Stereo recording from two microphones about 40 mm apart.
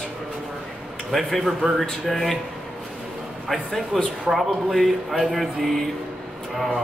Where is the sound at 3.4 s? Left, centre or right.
Centre.